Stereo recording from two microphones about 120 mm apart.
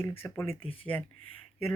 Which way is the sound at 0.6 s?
50° left (ahead or behind).